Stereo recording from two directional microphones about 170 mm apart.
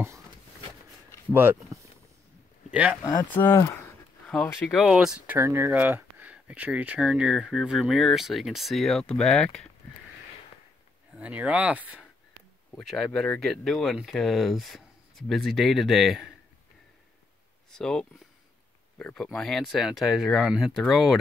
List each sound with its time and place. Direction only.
1.3 s speech: 15° right (ahead or behind)
3.0 s speech: 25° left (ahead or behind)
3.3 s speech: 10° left (ahead or behind)
11.1 s speech: 10° right (ahead or behind)
12.7 s speech: 5° left (ahead or behind)
17.6 s speech: 5° left (ahead or behind)